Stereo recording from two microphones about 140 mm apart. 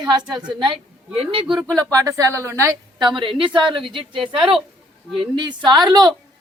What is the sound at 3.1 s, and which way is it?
Speech, 35° right (ahead or behind).